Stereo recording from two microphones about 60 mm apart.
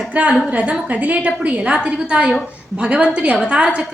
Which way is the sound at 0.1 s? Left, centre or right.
Right.